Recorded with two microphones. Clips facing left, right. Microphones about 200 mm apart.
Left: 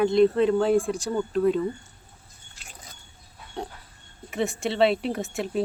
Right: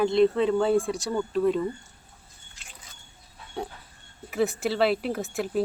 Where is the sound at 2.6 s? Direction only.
40° left (ahead or behind).